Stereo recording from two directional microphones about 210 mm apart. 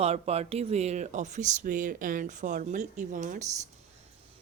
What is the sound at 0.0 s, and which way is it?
Speech, 30° right (ahead or behind).